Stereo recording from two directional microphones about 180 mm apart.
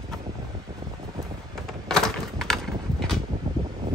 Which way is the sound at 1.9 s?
Centre (ahead or behind).